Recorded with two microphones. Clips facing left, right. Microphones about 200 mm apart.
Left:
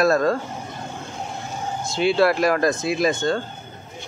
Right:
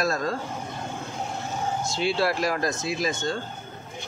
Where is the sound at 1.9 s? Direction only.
60° left (ahead or behind).